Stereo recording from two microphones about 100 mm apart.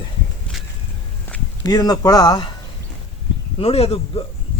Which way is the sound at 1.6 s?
40° left (ahead or behind).